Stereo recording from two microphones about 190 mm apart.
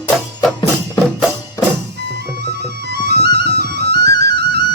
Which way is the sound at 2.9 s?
60° right (ahead or behind).